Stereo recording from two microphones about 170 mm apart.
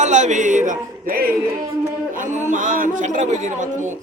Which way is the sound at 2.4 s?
50° right (ahead or behind).